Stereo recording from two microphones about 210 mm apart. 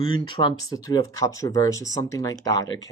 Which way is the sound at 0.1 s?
20° left (ahead or behind).